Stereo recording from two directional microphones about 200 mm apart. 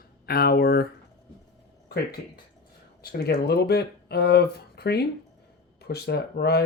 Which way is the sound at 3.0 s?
50° left (ahead or behind).